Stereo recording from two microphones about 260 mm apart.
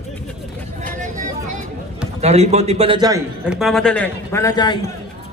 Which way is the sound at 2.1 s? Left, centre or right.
Right.